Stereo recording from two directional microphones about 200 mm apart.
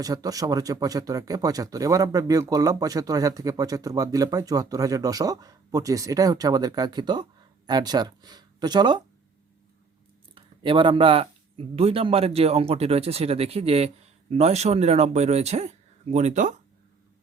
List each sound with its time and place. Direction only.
0.0 s speech: 20° right (ahead or behind)
10.3 s speech: 25° right (ahead or behind)